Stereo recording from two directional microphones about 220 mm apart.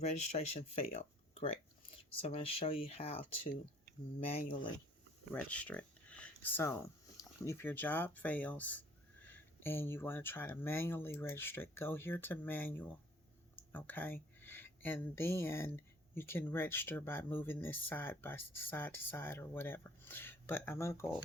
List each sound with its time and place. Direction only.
0.0 s speech: 30° left (ahead or behind)
0.9 s a sound: 25° left (ahead or behind)
2.2 s speech: 25° left (ahead or behind)
5.3 s speech: 5° left (ahead or behind)